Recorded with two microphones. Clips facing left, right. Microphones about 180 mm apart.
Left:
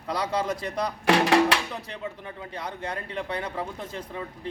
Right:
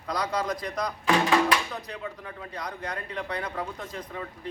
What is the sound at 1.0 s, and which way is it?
Speech, 75° left (ahead or behind).